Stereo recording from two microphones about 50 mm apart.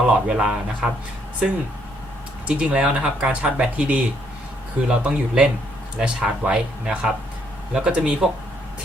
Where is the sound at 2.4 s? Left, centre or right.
Right.